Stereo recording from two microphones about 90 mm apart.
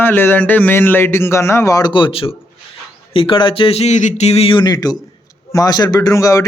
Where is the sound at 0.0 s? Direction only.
25° left (ahead or behind).